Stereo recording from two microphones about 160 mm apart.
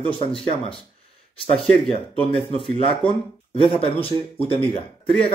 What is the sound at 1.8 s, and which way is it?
Speech, 35° left (ahead or behind).